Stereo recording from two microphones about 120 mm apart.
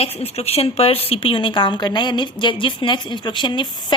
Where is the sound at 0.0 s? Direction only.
55° left (ahead or behind).